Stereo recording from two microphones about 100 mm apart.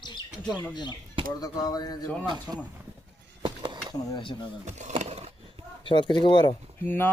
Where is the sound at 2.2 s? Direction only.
50° right (ahead or behind).